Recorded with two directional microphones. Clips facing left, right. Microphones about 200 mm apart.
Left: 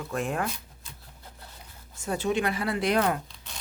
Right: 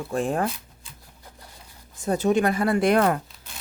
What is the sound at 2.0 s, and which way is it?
Speech, 40° right (ahead or behind).